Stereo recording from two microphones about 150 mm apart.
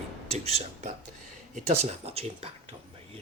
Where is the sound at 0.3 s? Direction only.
45° right (ahead or behind).